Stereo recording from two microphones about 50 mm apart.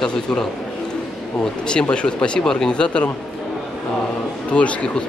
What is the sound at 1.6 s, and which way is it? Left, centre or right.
Speech, centre.